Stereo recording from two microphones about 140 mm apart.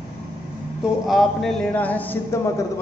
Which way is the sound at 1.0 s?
Centre (ahead or behind).